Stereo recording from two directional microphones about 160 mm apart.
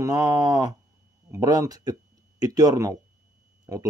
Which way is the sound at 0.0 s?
20° right (ahead or behind).